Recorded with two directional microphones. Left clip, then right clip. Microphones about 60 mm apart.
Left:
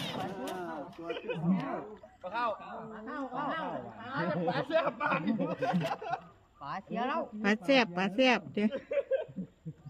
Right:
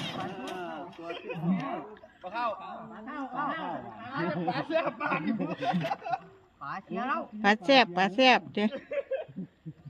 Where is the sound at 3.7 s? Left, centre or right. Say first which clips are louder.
Right 1 dB; left.